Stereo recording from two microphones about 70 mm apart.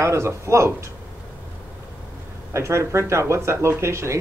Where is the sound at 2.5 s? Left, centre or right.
Right.